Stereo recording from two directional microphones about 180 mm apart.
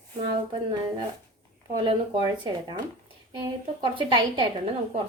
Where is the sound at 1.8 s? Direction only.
25° right (ahead or behind).